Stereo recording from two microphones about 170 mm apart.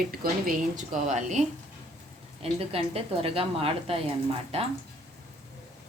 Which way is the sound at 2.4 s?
35° right (ahead or behind).